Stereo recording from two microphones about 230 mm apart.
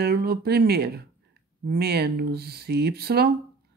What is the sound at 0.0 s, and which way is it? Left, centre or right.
A woman's voice, right.